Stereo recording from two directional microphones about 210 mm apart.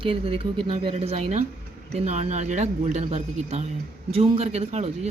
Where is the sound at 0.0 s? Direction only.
25° right (ahead or behind).